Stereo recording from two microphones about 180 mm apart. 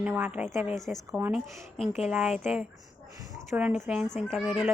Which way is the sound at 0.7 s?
Centre (ahead or behind).